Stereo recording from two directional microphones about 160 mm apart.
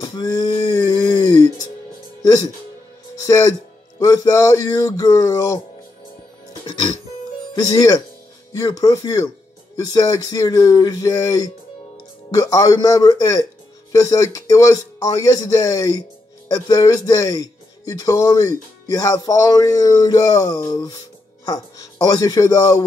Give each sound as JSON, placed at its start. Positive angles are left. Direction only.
{"t": 0.0, "sound": "music", "side_deg": 25}
{"t": 2.2, "sound": "speech", "side_deg": 25}
{"t": 7.5, "sound": "speech", "side_deg": 25}